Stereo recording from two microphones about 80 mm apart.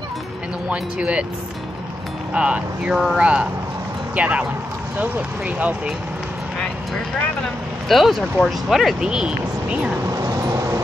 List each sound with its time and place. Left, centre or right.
0.7 s speech: centre
2.3 s speech: centre
7.9 s speech: centre
10.0 s vehicle: right